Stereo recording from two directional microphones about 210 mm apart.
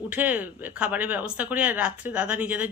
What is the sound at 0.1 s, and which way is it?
A woman's voice, 10° right (ahead or behind).